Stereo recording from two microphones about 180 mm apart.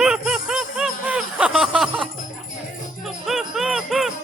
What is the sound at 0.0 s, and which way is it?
Jingle bell, 5° right (ahead or behind).